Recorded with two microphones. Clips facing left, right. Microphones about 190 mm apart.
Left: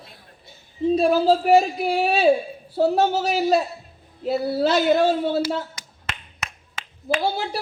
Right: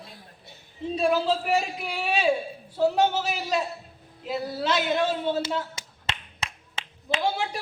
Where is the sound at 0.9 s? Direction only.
40° left (ahead or behind).